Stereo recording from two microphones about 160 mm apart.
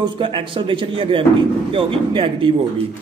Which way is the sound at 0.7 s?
35° right (ahead or behind).